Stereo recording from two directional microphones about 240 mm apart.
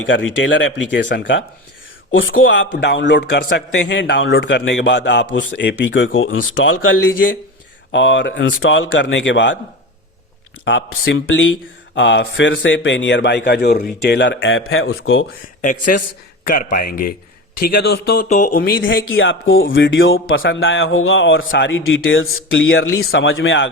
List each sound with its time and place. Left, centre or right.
0.1 s a man's voice: left
2.5 s a man's voice: left
7.9 s a man's voice: left
10.7 s a man's voice: left
15.6 s speech: left
18.8 s a man's voice: left